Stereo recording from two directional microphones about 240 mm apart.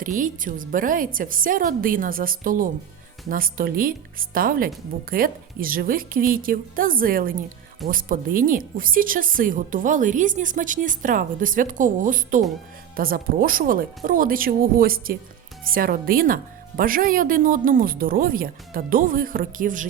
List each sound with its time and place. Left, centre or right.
0.0 s a woman's voice: right